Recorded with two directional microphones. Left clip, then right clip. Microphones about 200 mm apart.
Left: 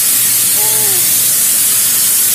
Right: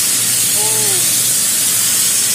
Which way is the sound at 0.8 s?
45° left (ahead or behind).